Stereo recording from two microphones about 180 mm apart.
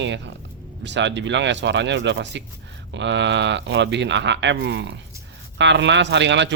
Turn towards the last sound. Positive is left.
turn(degrees=-80)